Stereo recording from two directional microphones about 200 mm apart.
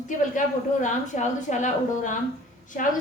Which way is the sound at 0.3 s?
40° left (ahead or behind).